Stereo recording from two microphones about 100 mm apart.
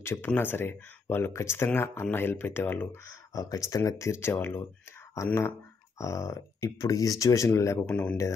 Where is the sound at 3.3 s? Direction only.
35° left (ahead or behind).